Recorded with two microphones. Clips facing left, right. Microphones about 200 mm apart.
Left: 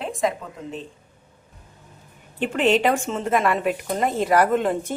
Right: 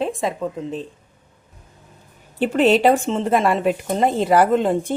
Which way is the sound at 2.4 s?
35° right (ahead or behind).